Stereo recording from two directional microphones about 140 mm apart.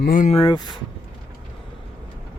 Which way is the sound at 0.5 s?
30° left (ahead or behind).